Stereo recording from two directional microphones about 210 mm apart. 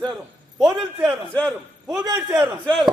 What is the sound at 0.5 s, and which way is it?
A man's voice, 5° right (ahead or behind).